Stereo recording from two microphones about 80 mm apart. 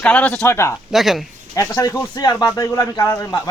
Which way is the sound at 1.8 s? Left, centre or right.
Left.